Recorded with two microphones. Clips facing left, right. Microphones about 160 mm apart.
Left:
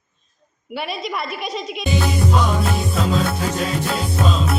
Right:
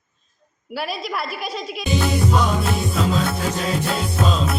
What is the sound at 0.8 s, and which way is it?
Speech, centre (ahead or behind).